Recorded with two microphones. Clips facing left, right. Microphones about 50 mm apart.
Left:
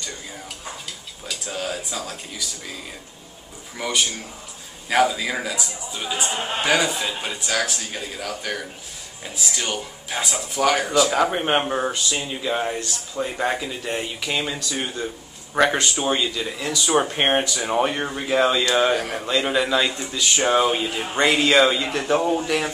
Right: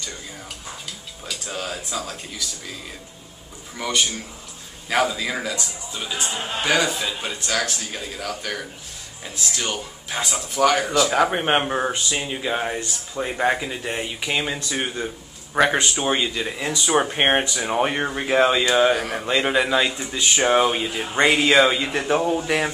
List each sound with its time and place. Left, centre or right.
1.2 s a sound: centre
3.7 s speech: centre
6.3 s a man's voice: left
6.6 s speech: centre
11.2 s speech: centre
15.5 s speech: centre
16.2 s speech: right
17.6 s speech: centre
18.1 s speech: right
18.8 s speech: centre
19.2 s speech: centre
20.1 s speech: right
20.4 s speech: centre
22.5 s speech: right